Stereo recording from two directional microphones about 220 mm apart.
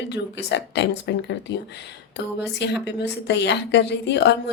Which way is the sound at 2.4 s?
50° left (ahead or behind).